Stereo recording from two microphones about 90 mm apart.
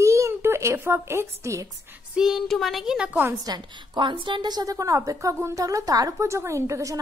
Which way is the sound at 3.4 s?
50° right (ahead or behind).